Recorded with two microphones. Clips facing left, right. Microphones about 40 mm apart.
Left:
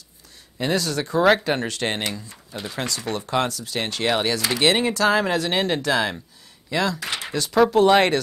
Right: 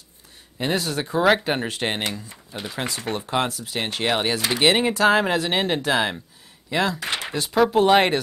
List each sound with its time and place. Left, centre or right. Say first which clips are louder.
0.6 s speech: left 1 dB; centre
2.6 s speech: even; centre
3.1 s speech: left 1 dB; right
7.2 s a sound: even; centre
7.7 s speech: even; centre